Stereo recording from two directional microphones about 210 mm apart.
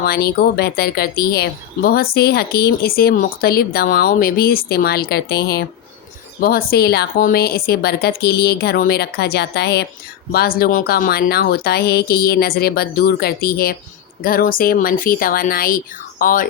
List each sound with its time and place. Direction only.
0.0 s speech: 45° left (ahead or behind)